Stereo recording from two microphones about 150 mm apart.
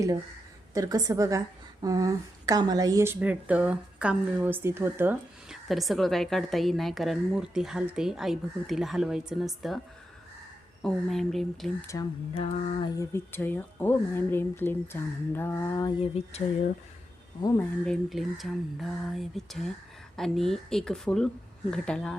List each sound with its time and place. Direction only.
0.7 s a woman's voice: 25° right (ahead or behind)
5.5 s a woman's voice: centre (ahead or behind)
10.8 s a woman's voice: centre (ahead or behind)
12.8 s speech: 20° left (ahead or behind)
16.0 s speech: 45° left (ahead or behind)
17.4 s speech: 20° left (ahead or behind)
17.8 s a woman's voice: centre (ahead or behind)